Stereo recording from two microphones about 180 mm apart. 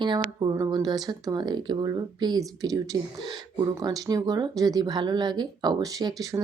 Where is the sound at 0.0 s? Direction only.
25° right (ahead or behind).